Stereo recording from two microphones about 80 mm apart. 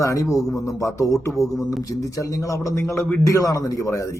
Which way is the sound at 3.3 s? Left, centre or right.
Left.